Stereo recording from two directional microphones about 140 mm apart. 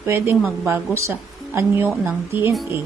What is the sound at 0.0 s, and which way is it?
Speech, 20° right (ahead or behind).